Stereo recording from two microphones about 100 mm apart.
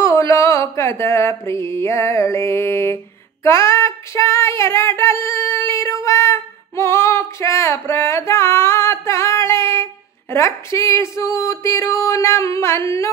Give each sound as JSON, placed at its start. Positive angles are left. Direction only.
{"t": 0.0, "sound": "mantra", "side_deg": 30}
{"t": 3.4, "sound": "a sound", "side_deg": 30}
{"t": 10.3, "sound": "speech", "side_deg": 30}